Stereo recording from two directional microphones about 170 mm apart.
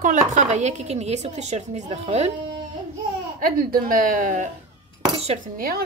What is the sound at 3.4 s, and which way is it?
Speech, 60° right (ahead or behind).